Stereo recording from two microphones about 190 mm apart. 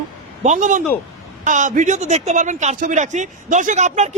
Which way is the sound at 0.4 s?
40° right (ahead or behind).